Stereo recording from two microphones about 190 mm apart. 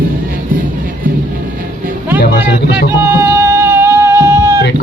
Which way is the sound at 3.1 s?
15° right (ahead or behind).